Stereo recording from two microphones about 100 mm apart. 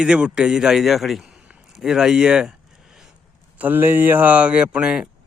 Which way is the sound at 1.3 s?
10° right (ahead or behind).